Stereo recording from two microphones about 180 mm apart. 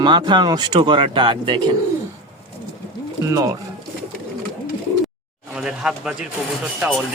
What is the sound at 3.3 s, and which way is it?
Speech, 15° right (ahead or behind).